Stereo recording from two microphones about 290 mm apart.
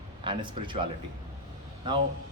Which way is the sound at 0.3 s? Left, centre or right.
Centre.